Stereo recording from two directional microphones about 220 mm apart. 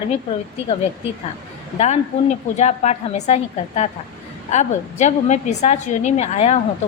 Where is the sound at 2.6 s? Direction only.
30° left (ahead or behind).